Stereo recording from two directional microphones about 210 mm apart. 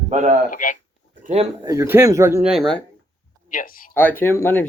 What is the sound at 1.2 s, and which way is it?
Speech, 30° right (ahead or behind).